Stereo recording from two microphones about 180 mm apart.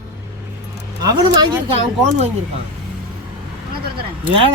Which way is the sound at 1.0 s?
20° right (ahead or behind).